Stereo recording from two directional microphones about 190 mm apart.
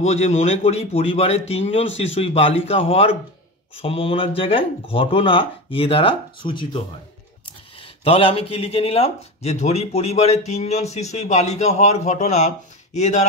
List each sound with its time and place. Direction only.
0.1 s speech: 35° left (ahead or behind)
7.8 s speech: 30° left (ahead or behind)